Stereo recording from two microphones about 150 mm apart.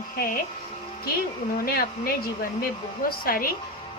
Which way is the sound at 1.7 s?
85° left.